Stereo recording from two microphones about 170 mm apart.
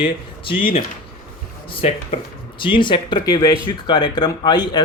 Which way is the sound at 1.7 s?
35° left (ahead or behind).